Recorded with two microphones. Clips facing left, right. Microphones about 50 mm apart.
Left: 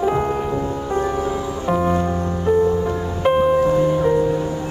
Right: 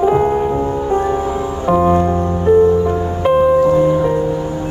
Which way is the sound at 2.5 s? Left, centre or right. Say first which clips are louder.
Right 6 dB; right.